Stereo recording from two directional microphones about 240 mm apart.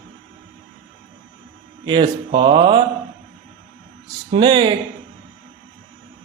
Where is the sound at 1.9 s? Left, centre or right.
Centre.